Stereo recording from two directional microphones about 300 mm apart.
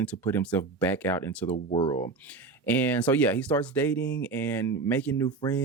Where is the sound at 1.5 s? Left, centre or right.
Centre.